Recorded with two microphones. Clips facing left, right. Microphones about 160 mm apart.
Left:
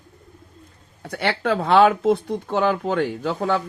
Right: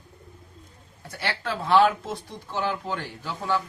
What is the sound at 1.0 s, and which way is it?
Speech, 65° left (ahead or behind).